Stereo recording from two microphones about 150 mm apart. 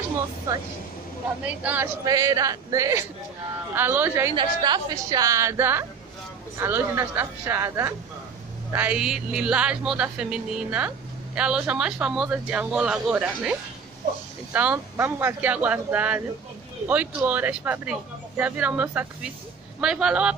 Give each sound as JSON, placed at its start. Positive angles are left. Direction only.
{"t": 0.5, "sound": "a woman's voice", "side_deg": -20}
{"t": 2.0, "sound": "a woman's voice", "side_deg": -25}
{"t": 4.4, "sound": "a woman's voice", "side_deg": -30}